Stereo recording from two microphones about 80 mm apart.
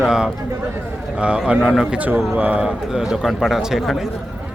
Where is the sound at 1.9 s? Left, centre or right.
Right.